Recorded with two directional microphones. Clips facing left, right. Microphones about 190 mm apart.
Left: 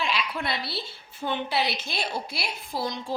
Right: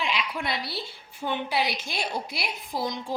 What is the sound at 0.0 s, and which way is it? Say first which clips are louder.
A woman's voice: even; 15° right (ahead or behind).